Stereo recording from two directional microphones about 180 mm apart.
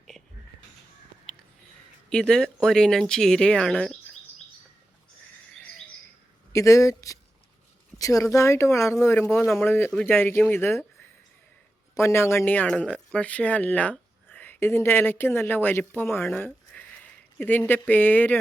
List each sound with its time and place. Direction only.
2.0 s speech: 5° left (ahead or behind)
5.5 s bird: 5° left (ahead or behind)
6.5 s speech: 15° left (ahead or behind)
11.9 s speech: 15° left (ahead or behind)
16.3 s a sound: 5° left (ahead or behind)
17.3 s speech: 10° left (ahead or behind)